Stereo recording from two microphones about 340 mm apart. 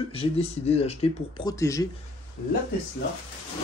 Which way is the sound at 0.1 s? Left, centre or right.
Centre.